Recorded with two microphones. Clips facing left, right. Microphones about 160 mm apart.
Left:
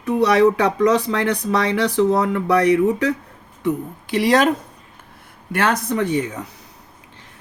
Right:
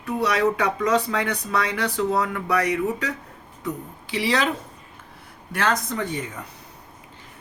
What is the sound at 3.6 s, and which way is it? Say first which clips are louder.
Speech: left 9 dB; 50° left (ahead or behind).